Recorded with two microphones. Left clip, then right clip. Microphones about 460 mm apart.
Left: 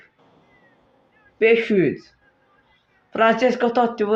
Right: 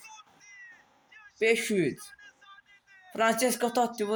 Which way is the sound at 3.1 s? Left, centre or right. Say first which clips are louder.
Left 9 dB; right.